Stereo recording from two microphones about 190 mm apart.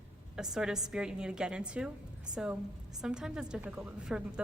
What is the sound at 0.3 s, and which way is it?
A woman's voice, 5° right (ahead or behind).